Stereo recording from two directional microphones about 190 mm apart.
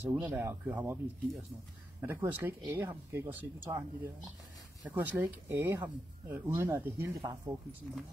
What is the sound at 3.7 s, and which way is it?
Speech, 25° right (ahead or behind).